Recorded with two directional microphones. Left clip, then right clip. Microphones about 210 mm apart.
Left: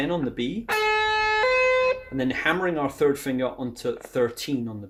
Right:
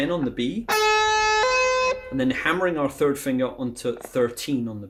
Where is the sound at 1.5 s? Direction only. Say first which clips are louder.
Even; 30° right (ahead or behind).